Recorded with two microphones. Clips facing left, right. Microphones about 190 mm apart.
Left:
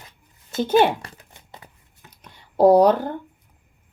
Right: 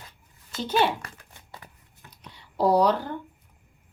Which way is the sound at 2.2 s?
50° left (ahead or behind).